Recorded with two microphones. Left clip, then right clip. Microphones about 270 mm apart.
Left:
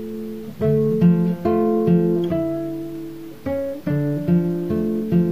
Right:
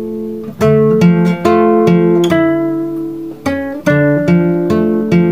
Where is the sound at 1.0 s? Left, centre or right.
Right.